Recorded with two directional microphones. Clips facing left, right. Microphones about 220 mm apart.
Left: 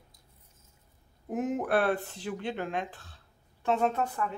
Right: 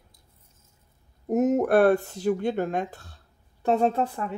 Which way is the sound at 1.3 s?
40° right (ahead or behind).